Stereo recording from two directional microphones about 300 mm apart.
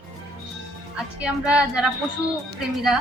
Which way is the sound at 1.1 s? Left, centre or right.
Centre.